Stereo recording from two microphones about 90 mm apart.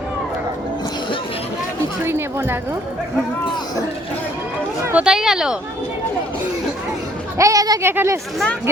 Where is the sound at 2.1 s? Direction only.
25° right (ahead or behind).